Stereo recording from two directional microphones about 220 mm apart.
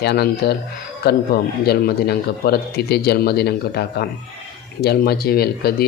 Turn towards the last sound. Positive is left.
turn(degrees=45)  # may be behind; listen again after turning